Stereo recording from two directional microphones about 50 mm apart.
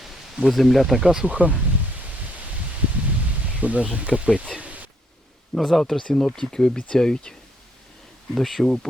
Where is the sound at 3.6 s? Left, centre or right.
Right.